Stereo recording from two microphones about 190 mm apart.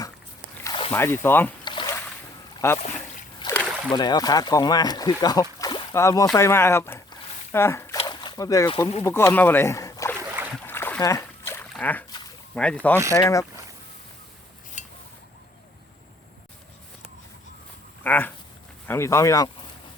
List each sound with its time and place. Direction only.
0.6 s a sound: 25° left (ahead or behind)
0.9 s speech: 10° left (ahead or behind)
1.6 s a sound: 25° left (ahead or behind)
2.6 s speech: 15° left (ahead or behind)
3.4 s splash: 25° left (ahead or behind)
3.9 s speech: 20° left (ahead or behind)
6.3 s a sound: 15° left (ahead or behind)
7.9 s boat: 25° left (ahead or behind)
9.0 s speech: 15° left (ahead or behind)
10.7 s splash: 10° left (ahead or behind)
11.7 s speech: 10° left (ahead or behind)
18.0 s a sound: 10° left (ahead or behind)
18.9 s speech: 15° left (ahead or behind)